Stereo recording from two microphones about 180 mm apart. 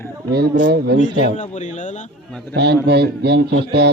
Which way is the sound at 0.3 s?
65° right (ahead or behind).